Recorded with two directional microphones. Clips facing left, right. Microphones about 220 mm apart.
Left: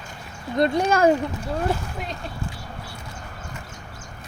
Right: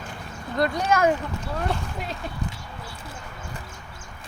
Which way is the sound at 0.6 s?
25° left (ahead or behind).